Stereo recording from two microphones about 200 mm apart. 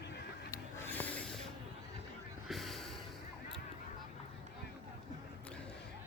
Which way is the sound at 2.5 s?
Centre (ahead or behind).